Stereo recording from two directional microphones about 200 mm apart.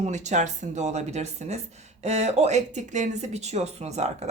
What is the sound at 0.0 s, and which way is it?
Speech, 35° right (ahead or behind).